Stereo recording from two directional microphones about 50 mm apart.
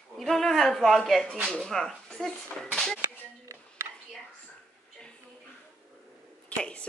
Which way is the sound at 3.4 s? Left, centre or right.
Right.